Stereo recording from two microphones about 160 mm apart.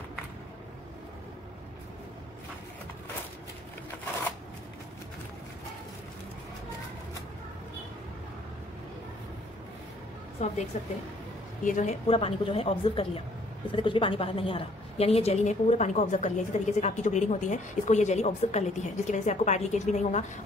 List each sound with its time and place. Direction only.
10.7 s a woman's voice: 45° left (ahead or behind)